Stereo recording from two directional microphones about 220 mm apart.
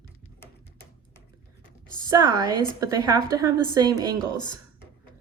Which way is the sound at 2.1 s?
20° right (ahead or behind).